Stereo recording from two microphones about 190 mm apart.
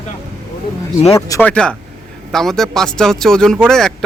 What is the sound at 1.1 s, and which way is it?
Speech, 10° left (ahead or behind).